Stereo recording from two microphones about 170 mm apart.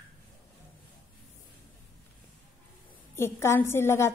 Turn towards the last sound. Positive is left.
turn(degrees=15)  # may be behind; listen again after turning